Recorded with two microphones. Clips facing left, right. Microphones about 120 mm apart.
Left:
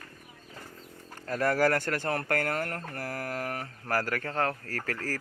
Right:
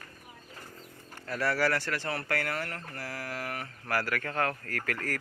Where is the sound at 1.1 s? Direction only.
40° left (ahead or behind).